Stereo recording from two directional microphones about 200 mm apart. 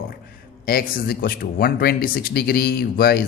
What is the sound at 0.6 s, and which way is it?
Speech, 45° left (ahead or behind).